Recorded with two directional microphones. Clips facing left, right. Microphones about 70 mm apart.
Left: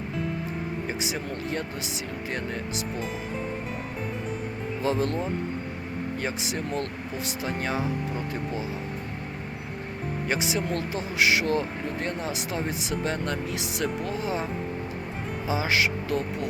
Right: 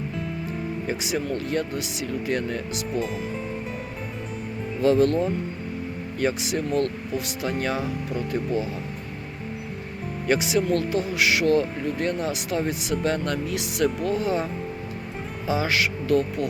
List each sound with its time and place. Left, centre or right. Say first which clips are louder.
0.9 s speech: right 4 dB; left
4.8 s speech: right 8 dB; centre
6.1 s speech: right 9 dB; left
10.2 s speech: right 7 dB; left
15.4 s speech: right 2 dB; centre